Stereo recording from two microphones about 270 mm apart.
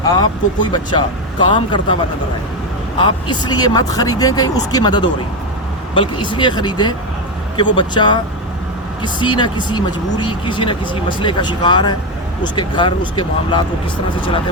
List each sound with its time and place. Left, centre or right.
0.1 s speech: centre
3.0 s speech: centre